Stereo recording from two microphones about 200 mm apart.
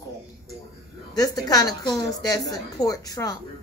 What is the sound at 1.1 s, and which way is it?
Speech, 20° left (ahead or behind).